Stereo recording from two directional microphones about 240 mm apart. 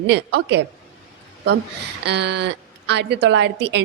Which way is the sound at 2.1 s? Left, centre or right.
Right.